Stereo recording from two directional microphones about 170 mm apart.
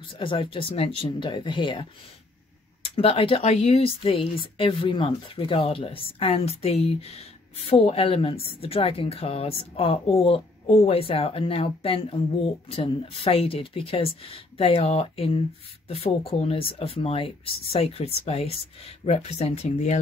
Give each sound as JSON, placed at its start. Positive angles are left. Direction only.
{"t": 0.0, "sound": "speech", "side_deg": 30}
{"t": 3.0, "sound": "speech", "side_deg": 35}